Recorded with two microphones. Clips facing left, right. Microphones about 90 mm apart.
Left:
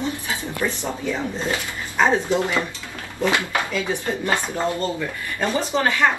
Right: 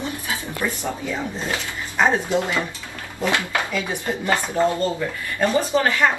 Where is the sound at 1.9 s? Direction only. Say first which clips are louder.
Left 1 dB; 15° right (ahead or behind).